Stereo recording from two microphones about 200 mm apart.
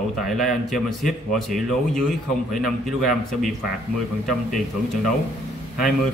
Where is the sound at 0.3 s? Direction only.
Centre (ahead or behind).